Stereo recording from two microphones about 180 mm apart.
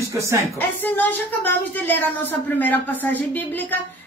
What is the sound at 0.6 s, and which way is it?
Speech, 10° left (ahead or behind).